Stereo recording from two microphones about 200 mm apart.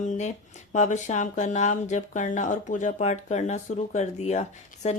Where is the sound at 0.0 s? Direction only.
35° left (ahead or behind).